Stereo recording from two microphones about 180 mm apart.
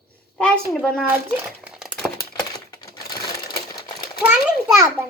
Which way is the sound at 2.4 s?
20° left (ahead or behind).